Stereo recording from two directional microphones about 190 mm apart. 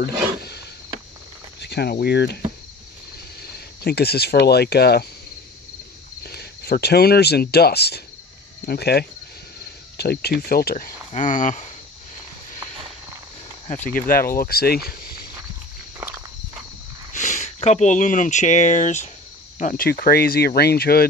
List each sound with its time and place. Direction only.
0.0 s speech: 60° left (ahead or behind)
3.4 s speech: 55° left (ahead or behind)
6.2 s speech: 55° left (ahead or behind)
11.1 s speech: 40° left (ahead or behind)
13.9 s speech: 50° left (ahead or behind)
17.1 s speech: 40° left (ahead or behind)